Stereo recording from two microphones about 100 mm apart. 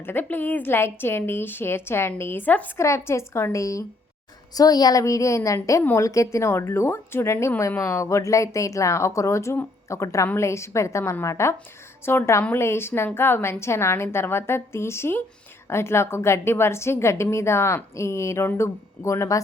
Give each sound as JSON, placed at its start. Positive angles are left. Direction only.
{"t": 0.0, "sound": "a woman's voice", "side_deg": 20}
{"t": 2.8, "sound": "a woman's voice", "side_deg": 30}